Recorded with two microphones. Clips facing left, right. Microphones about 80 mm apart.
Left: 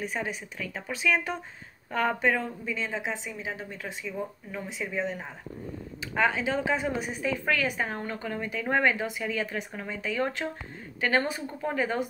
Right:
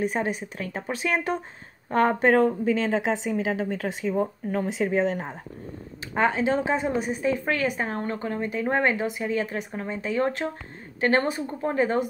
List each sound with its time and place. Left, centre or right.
0.0 s speech: right
2.3 s a woman's voice: right
4.1 s speech: right
4.8 s a woman's voice: right